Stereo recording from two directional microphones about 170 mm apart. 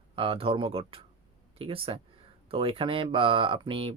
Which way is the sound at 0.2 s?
30° right (ahead or behind).